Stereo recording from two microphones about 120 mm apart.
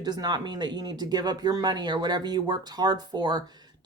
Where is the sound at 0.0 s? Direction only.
35° right (ahead or behind).